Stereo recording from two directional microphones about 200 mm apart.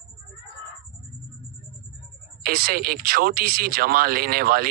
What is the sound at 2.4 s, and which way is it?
Speech, 50° right (ahead or behind).